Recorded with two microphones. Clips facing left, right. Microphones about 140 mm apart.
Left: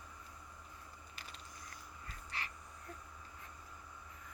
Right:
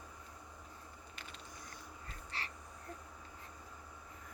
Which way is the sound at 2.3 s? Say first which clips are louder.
Even; 30° right (ahead or behind).